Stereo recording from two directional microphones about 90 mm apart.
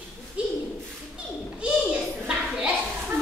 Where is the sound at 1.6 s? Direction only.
10° right (ahead or behind).